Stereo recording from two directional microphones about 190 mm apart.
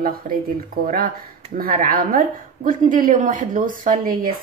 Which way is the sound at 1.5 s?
50° right (ahead or behind).